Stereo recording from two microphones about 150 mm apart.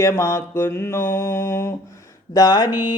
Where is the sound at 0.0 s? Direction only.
20° left (ahead or behind).